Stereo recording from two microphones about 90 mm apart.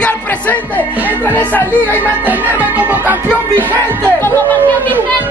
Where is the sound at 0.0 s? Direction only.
15° left (ahead or behind).